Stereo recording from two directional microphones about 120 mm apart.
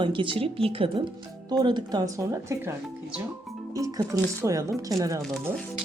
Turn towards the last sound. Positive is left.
turn(degrees=-30)  # may be behind; listen again after turning